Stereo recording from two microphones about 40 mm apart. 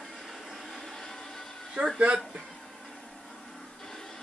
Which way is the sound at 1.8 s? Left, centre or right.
Right.